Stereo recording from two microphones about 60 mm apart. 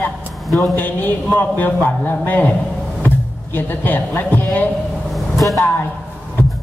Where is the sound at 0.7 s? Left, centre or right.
Left.